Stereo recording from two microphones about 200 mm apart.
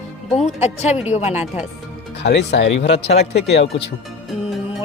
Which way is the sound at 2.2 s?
60° left (ahead or behind).